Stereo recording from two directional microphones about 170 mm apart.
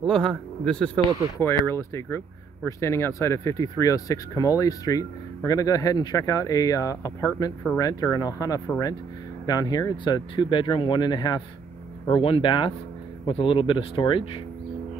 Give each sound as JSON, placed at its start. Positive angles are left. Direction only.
{"t": 0.0, "sound": "speech", "side_deg": 0}